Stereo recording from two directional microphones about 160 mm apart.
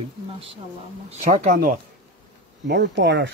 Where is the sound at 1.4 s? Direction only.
60° right (ahead or behind).